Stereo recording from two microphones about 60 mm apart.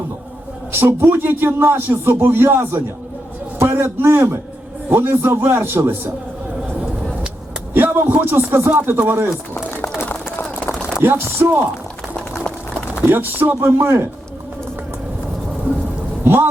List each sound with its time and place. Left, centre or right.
0.7 s a man's voice: right
7.7 s a sound: right
8.0 s speech: right
11.0 s speech: right
13.1 s speech: right
16.2 s thunder: right